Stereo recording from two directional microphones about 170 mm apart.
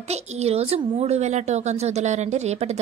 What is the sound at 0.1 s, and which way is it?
A woman's voice, 40° right (ahead or behind).